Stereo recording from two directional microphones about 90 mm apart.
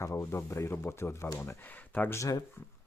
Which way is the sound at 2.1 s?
40° left (ahead or behind).